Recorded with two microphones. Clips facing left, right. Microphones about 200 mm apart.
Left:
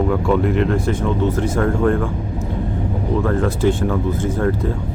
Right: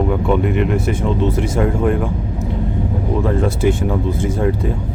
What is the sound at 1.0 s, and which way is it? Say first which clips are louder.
Speech: right 1 dB; 25° right (ahead or behind).